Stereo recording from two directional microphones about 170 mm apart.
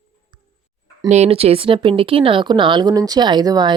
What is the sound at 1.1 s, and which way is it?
A woman's voice, 40° right (ahead or behind).